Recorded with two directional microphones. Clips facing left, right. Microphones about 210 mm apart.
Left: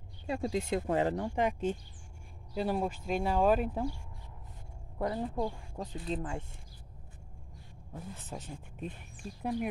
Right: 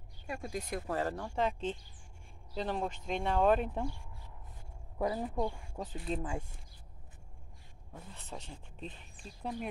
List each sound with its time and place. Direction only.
0.3 s speech: 25° left (ahead or behind); by 3.9 s 5° left (ahead or behind)
4.9 s speech: 5° right (ahead or behind)
7.9 s speech: 5° left (ahead or behind)